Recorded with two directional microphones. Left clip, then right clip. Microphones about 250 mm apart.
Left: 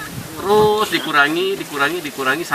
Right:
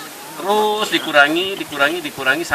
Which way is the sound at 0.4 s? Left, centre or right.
Centre.